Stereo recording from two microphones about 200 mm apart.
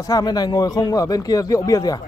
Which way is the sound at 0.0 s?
20° left (ahead or behind).